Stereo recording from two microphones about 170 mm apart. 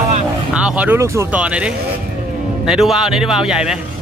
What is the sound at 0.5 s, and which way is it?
A man's voice, 5° right (ahead or behind).